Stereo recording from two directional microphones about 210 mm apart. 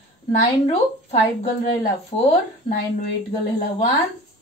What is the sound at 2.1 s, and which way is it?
Speech, 25° left (ahead or behind).